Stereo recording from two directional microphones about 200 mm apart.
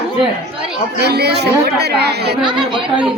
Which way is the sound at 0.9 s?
55° right (ahead or behind).